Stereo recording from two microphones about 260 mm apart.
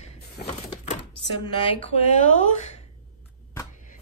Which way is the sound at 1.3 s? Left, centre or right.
Centre.